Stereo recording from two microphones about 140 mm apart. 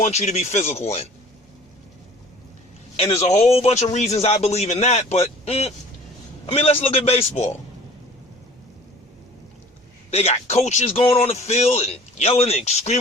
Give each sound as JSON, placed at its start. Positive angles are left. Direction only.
{"t": 0.0, "sound": "a man's voice", "side_deg": 50}
{"t": 3.2, "sound": "a man's voice", "side_deg": 55}
{"t": 10.1, "sound": "a man's voice", "side_deg": 50}